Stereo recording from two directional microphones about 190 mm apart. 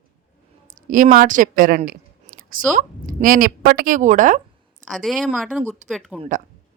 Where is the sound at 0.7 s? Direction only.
45° right (ahead or behind).